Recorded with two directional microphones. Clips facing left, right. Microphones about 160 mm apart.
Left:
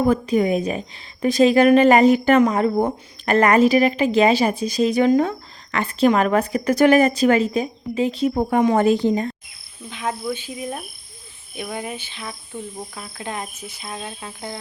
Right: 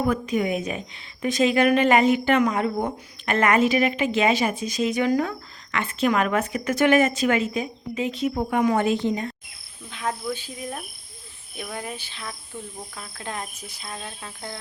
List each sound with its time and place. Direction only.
0.0 s speech: 30° left (ahead or behind)
5.7 s speech: 35° left (ahead or behind)
9.9 s cricket: 5° left (ahead or behind)